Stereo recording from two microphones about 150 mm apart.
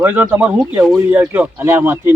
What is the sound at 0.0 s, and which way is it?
Speech, 10° right (ahead or behind).